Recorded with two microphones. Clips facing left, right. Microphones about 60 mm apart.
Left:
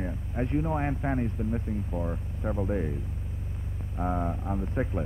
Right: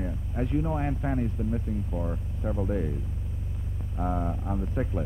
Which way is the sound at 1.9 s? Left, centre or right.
Centre.